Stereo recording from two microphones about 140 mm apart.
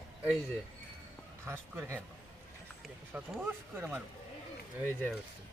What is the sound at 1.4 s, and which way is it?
Speech, 20° right (ahead or behind).